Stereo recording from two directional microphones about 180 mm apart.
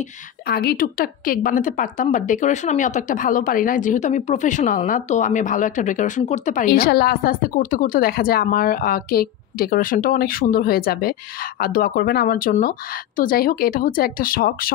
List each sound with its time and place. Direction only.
0.5 s speech: 60° left (ahead or behind)